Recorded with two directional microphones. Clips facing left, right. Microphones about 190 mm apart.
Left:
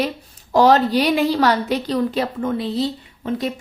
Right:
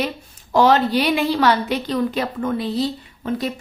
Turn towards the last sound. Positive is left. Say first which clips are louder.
# even
turn(degrees=20)  # may be behind; listen again after turning